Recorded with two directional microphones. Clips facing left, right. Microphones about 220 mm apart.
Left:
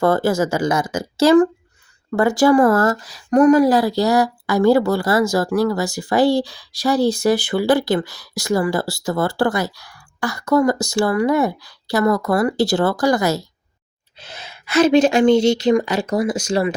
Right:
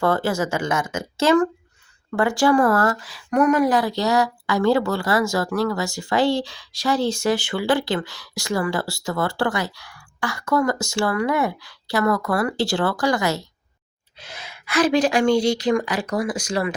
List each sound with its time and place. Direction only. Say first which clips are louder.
0.0 s speech: left 4 dB; 40° left (ahead or behind); by 16.7 s 25° left (ahead or behind)